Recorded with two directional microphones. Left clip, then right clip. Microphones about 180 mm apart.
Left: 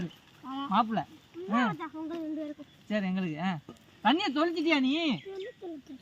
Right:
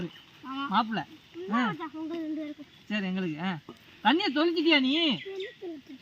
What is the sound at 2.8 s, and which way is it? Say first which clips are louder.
Speech: even; 40° left (ahead or behind).